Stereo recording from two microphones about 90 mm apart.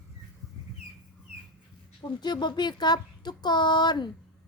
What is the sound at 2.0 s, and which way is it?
Speech, 55° left (ahead or behind).